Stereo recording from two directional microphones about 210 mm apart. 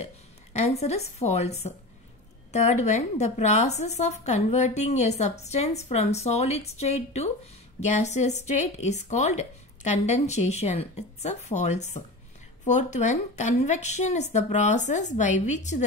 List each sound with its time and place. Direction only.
0.0 s a woman's voice: 30° left (ahead or behind)